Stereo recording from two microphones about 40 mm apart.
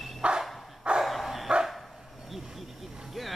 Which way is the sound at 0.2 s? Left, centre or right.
Right.